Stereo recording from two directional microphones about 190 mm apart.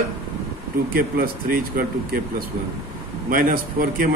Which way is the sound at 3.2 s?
45° right (ahead or behind).